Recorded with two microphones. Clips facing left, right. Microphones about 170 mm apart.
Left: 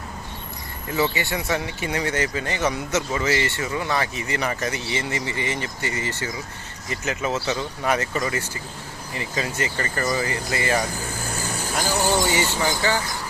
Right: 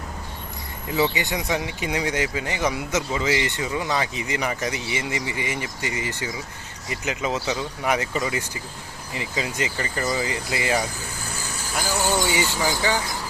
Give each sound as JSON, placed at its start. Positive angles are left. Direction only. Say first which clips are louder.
{"t": 0.9, "sound": "speech", "louder": "even", "side_deg": -15}
{"t": 12.3, "sound": "speech", "louder": "left 1 dB", "side_deg": -10}